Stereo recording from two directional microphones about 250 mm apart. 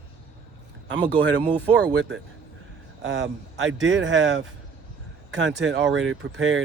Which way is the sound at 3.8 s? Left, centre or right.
Right.